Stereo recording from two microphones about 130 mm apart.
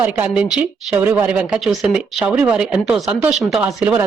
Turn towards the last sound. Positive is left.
turn(degrees=-10)  # may be behind; listen again after turning